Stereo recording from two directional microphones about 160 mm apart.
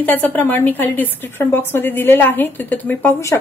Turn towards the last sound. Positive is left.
turn(degrees=15)  # may be behind; listen again after turning